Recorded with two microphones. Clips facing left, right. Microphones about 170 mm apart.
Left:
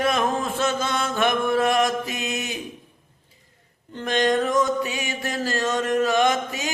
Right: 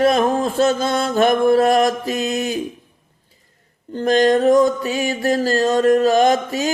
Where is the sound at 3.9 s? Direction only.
40° right (ahead or behind).